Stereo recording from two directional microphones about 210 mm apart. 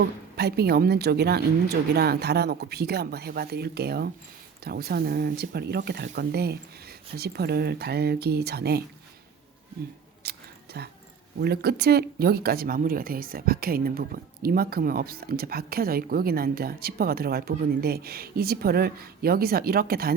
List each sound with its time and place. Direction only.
0.3 s speech: 50° right (ahead or behind)
10.2 s a sound: 50° right (ahead or behind)
11.3 s speech: 50° right (ahead or behind)